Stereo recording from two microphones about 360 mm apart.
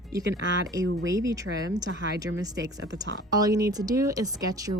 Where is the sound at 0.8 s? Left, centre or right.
Right.